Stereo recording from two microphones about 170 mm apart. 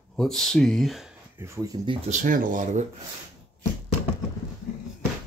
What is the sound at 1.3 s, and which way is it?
Speech, 15° right (ahead or behind).